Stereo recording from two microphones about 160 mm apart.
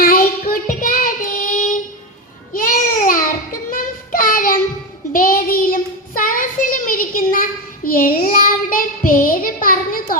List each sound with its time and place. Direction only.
0.0 s child singing: 65° left (ahead or behind)
2.5 s a sound: 60° left (ahead or behind)
3.7 s child singing: 60° left (ahead or behind)